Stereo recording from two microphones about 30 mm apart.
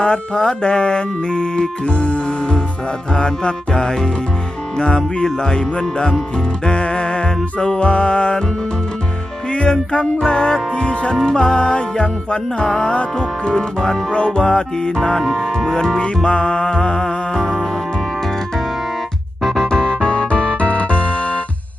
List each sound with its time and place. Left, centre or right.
0.0 s music: left
1.8 s music: left
5.4 s music: left
9.5 s music: left
12.6 s music: left
14.1 s music: left
15.2 s speech: centre
16.0 s music: left
19.4 s music: centre
19.6 s music: left